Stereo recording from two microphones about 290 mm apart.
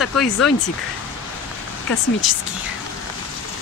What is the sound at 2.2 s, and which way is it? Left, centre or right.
Speech, centre.